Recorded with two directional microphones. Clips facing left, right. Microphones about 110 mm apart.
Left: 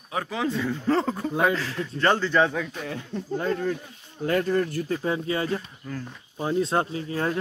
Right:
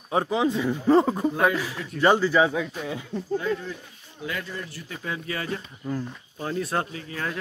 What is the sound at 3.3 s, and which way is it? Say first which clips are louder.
Speech: left 3 dB; 45° left (ahead or behind).